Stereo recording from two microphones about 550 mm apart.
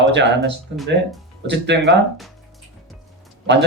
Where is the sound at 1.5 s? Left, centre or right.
Centre.